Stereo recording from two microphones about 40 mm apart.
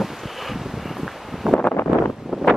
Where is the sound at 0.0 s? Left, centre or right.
Centre.